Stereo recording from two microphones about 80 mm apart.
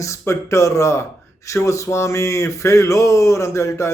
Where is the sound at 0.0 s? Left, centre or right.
Left.